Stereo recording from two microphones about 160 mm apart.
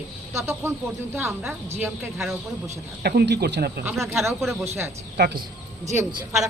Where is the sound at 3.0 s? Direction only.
90° right.